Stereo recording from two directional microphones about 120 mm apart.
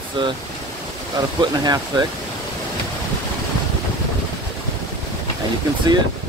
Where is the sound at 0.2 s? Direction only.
40° right (ahead or behind).